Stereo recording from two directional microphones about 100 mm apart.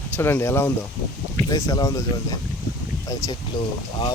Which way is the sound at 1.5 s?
35° left (ahead or behind).